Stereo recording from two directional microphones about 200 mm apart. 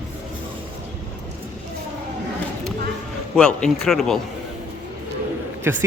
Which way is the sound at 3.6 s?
Centre (ahead or behind).